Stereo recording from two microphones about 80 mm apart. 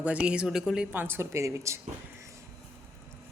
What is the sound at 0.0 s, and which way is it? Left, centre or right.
Speech, centre.